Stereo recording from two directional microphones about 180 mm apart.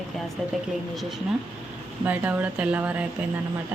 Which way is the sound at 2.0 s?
10° right (ahead or behind).